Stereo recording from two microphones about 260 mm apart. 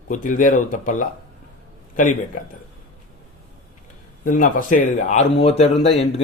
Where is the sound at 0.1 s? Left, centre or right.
Left.